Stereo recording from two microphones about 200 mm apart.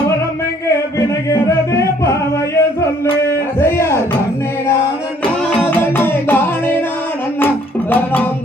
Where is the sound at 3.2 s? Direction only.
10° left (ahead or behind).